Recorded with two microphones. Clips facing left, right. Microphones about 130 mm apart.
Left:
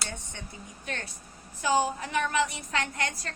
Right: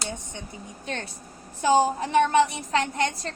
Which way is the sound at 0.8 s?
25° right (ahead or behind).